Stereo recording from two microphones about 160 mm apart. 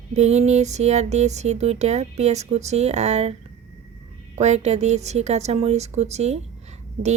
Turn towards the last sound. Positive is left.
turn(degrees=-45)  # may be behind; listen again after turning